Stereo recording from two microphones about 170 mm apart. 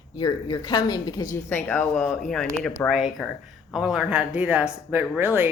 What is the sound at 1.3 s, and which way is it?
Speech, 10° left (ahead or behind).